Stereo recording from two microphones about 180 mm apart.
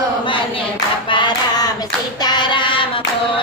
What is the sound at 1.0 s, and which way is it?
Hands, 25° left (ahead or behind).